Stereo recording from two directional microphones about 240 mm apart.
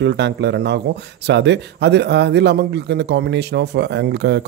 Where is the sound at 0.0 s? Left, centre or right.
Right.